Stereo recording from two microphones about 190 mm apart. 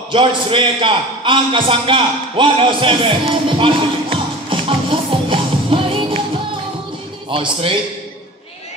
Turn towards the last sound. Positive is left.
turn(degrees=-25)  # may be behind; listen again after turning